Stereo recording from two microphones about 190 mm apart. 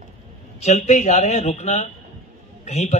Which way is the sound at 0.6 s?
35° left (ahead or behind).